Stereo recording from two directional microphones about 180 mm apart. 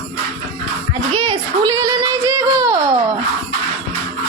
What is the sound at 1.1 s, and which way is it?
A woman's voice, 25° right (ahead or behind).